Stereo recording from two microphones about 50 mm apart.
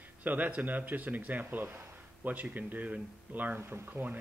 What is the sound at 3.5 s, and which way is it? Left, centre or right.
Speech, right.